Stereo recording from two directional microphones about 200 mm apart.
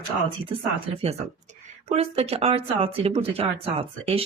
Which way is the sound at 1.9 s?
30° right (ahead or behind).